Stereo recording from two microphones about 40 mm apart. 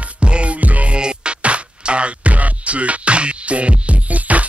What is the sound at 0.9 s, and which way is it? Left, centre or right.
Music, right.